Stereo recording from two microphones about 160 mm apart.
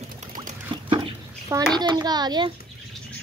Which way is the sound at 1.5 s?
25° right (ahead or behind).